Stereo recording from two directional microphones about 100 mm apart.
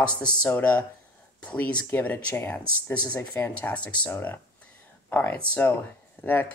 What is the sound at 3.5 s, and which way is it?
Speech, 15° left (ahead or behind).